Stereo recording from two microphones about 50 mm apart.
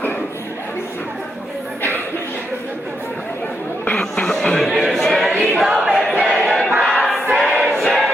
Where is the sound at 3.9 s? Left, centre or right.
Centre.